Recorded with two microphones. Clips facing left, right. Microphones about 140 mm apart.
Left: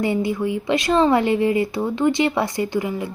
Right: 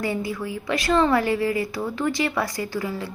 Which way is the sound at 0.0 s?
25° left (ahead or behind).